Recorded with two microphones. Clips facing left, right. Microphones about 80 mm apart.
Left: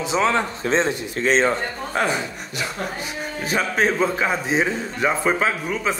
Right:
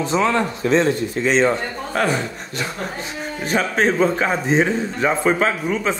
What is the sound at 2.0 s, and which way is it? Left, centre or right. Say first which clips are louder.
Speech: right 2 dB; left.